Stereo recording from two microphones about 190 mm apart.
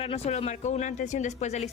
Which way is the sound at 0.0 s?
30° left (ahead or behind).